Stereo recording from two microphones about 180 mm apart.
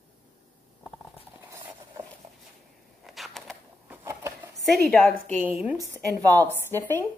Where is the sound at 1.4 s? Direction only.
15° right (ahead or behind).